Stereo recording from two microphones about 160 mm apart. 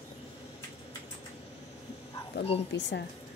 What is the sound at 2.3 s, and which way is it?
Speech, 90° left.